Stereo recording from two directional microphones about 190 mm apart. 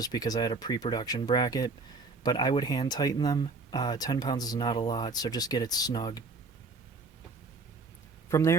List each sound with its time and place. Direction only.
0.0 s speech: 20° left (ahead or behind)
8.3 s a man's voice: 15° left (ahead or behind)